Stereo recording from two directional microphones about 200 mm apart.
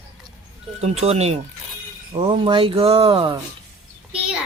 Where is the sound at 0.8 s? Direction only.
30° right (ahead or behind).